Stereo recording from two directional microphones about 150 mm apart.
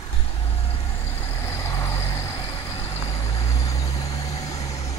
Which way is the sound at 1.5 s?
20° left (ahead or behind).